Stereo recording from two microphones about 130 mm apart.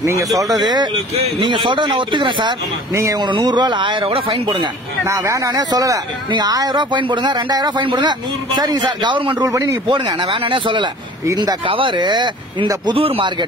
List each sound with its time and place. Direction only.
0.4 s speech: 30° right (ahead or behind)
2.9 s speech: 25° right (ahead or behind)
5.0 s speech: 20° right (ahead or behind); by 13.5 s 40° right (ahead or behind)